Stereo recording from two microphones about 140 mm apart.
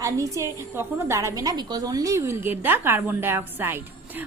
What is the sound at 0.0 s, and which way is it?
A woman's voice, 20° right (ahead or behind).